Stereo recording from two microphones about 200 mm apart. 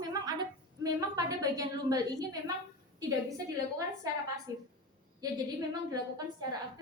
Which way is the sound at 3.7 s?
20° right (ahead or behind).